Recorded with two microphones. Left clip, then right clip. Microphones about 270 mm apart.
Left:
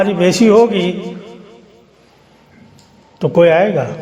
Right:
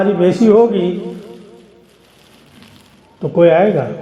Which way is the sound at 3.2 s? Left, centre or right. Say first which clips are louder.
Even; left.